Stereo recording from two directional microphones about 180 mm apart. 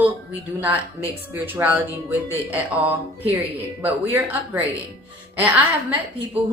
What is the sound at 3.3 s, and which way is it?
Speech, 10° right (ahead or behind).